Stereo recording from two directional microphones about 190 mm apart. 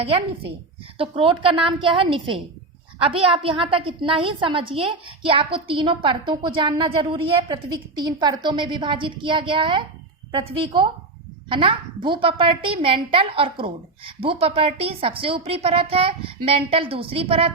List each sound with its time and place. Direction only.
0.9 s a woman's voice: 30° right (ahead or behind)